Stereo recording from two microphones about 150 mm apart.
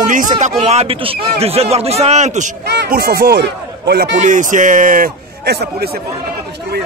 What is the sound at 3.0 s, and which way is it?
Speech, 90° right.